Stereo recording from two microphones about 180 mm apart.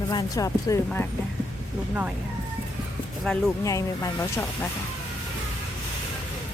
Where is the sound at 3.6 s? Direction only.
15° left (ahead or behind).